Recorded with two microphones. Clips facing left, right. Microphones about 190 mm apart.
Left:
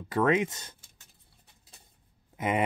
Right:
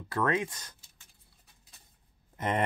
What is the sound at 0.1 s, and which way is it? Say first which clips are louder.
Speech: left 4 dB; 20° left (ahead or behind).